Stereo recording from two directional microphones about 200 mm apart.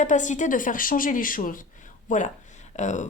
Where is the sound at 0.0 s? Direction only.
40° left (ahead or behind).